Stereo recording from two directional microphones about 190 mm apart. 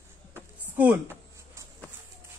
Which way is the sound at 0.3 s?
10° right (ahead or behind).